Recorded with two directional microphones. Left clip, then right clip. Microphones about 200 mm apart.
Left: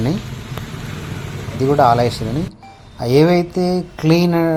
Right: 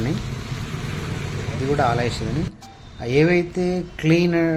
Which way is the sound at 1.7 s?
20° left (ahead or behind).